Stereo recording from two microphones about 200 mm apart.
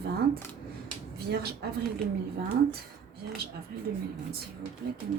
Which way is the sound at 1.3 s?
50° right (ahead or behind).